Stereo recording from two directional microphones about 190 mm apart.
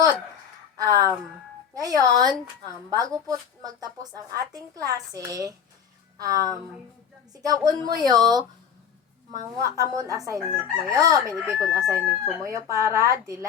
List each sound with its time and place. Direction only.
0.8 s chicken: 20° right (ahead or behind)
1.7 s a woman's voice: 20° right (ahead or behind)
7.4 s speech: 20° right (ahead or behind)
9.6 s chicken: 15° right (ahead or behind)